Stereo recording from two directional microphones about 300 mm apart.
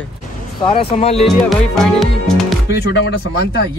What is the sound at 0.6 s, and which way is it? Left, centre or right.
Speech, centre.